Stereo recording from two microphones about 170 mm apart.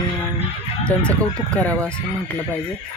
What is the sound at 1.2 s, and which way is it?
Speech, 5° left (ahead or behind).